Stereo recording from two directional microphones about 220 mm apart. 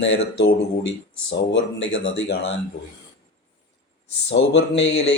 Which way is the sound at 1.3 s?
55° left (ahead or behind).